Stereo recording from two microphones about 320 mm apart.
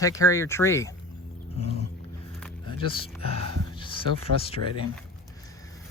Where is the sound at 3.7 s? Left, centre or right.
Centre.